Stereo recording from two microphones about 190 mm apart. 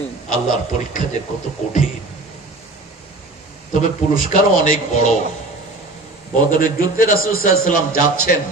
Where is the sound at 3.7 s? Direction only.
40° left (ahead or behind).